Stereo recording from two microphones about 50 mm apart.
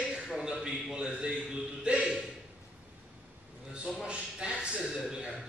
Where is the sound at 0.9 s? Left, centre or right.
Centre.